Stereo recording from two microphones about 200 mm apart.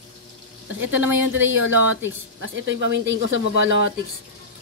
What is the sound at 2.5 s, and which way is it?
Speech, 65° right (ahead or behind).